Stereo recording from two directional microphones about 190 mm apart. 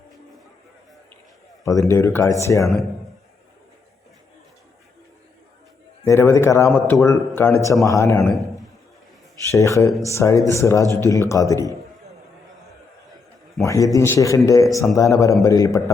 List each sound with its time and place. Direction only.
1.6 s speech: 15° left (ahead or behind)
6.1 s speech: 15° left (ahead or behind)
9.5 s speech: 15° left (ahead or behind)
13.6 s speech: 15° left (ahead or behind)